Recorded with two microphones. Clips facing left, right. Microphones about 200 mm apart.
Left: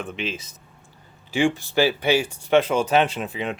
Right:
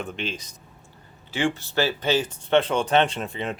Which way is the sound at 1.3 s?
15° left (ahead or behind).